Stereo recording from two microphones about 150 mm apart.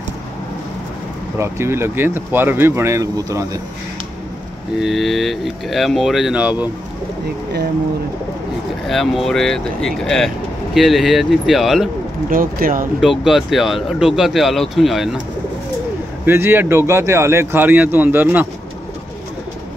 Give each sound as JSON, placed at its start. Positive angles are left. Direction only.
{"t": 1.4, "sound": "speech", "side_deg": -15}
{"t": 4.7, "sound": "speech", "side_deg": 0}
{"t": 8.8, "sound": "speech", "side_deg": 0}
{"t": 12.3, "sound": "speech", "side_deg": -70}
{"t": 13.0, "sound": "speech", "side_deg": 0}
{"t": 16.3, "sound": "speech", "side_deg": -15}